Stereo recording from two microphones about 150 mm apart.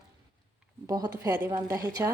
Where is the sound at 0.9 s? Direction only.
25° right (ahead or behind).